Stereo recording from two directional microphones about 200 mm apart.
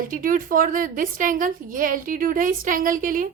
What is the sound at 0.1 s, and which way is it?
A woman's voice, 45° right (ahead or behind).